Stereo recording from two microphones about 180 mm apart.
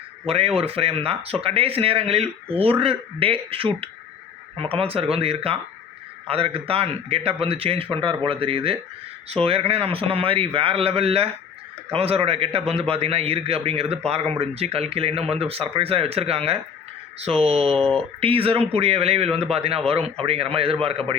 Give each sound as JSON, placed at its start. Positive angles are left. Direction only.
{"t": 0.3, "sound": "speech", "side_deg": -35}